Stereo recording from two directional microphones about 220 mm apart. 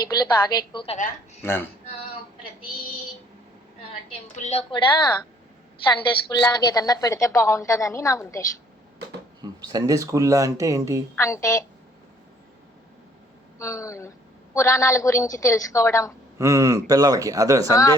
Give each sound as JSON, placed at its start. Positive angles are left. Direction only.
{"t": 0.2, "sound": "a woman's voice", "side_deg": 20}
{"t": 1.4, "sound": "speech", "side_deg": 10}
{"t": 4.4, "sound": "a woman's voice", "side_deg": 30}
{"t": 6.2, "sound": "a woman's voice", "side_deg": 20}
{"t": 9.4, "sound": "speech", "side_deg": -15}
{"t": 11.1, "sound": "a woman's voice", "side_deg": 15}
{"t": 13.6, "sound": "a woman's voice", "side_deg": 15}
{"t": 16.4, "sound": "speech", "side_deg": -15}
{"t": 17.7, "sound": "a woman's voice", "side_deg": 15}